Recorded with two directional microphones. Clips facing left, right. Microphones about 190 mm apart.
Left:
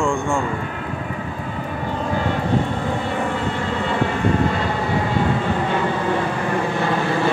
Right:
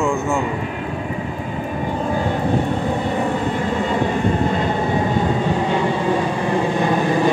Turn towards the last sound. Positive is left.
turn(degrees=-15)  # may be behind; listen again after turning